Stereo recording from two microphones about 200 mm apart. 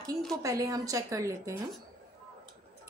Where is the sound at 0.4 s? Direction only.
15° right (ahead or behind).